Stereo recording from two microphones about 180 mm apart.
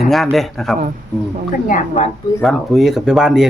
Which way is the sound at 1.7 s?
40° left (ahead or behind).